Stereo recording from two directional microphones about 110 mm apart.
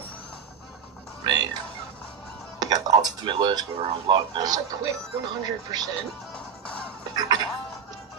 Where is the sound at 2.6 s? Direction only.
35° right (ahead or behind).